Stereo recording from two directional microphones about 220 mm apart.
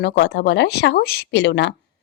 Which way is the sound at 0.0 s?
50° left (ahead or behind).